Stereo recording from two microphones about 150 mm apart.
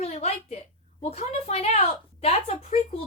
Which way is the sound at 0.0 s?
45° left (ahead or behind).